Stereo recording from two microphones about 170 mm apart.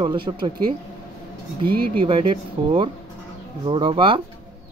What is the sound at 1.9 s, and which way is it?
Speech, 30° right (ahead or behind).